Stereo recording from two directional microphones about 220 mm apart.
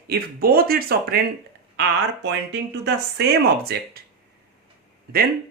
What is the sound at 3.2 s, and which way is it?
Speech, 50° right (ahead or behind).